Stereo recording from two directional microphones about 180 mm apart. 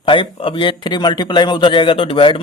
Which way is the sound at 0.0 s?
30° left (ahead or behind).